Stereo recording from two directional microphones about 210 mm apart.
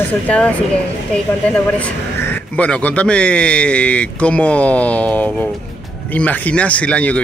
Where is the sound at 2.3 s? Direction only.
5° left (ahead or behind).